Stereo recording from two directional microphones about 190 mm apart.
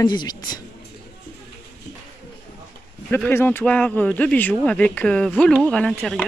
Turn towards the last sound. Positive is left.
turn(degrees=0)  # may be behind; listen again after turning